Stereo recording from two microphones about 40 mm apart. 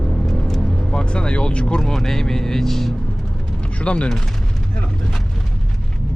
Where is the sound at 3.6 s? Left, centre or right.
Left.